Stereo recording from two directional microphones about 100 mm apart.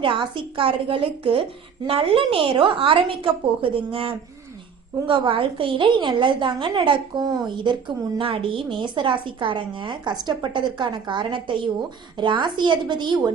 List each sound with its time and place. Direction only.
0.0 s a woman's voice: 55° right (ahead or behind)
5.0 s a woman's voice: 55° right (ahead or behind)